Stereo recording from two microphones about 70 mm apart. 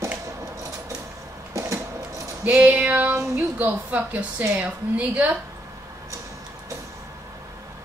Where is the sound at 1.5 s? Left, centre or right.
Right.